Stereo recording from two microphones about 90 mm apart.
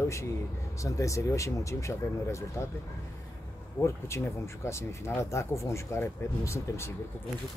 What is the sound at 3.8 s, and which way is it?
Speech, 30° left (ahead or behind).